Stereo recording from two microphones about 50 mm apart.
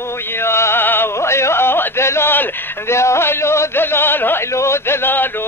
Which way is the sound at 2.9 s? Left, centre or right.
Left.